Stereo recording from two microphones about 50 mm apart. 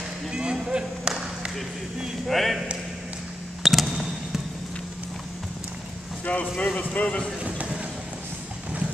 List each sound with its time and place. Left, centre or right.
0.3 s speech: centre
2.2 s speech: centre
3.6 s a sound: centre
6.3 s speech: left
7.4 s vehicle: right